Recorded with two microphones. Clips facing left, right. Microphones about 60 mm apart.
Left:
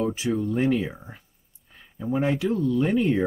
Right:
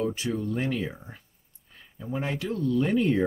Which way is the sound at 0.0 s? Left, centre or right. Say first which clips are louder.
Left 3 dB; centre.